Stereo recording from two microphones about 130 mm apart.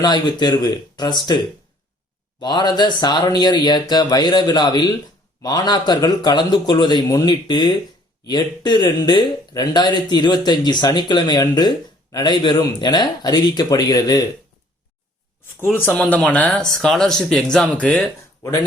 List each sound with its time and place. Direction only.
0.0 s speech: 35° left (ahead or behind)
2.4 s speech: 35° left (ahead or behind)
15.7 s speech: 15° left (ahead or behind)